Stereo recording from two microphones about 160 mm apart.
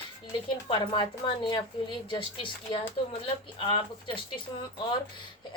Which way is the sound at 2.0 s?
35° left (ahead or behind).